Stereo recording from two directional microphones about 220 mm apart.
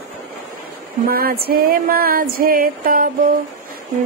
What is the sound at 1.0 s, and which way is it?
Mantra, 45° right (ahead or behind).